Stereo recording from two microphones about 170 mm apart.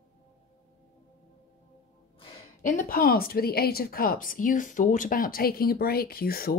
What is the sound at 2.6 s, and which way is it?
A woman's voice, 50° left (ahead or behind).